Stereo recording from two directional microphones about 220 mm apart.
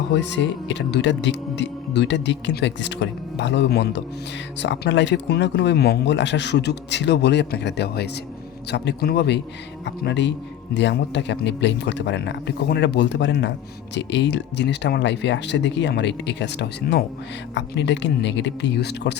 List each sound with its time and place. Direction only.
0.1 s speech: 55° left (ahead or behind)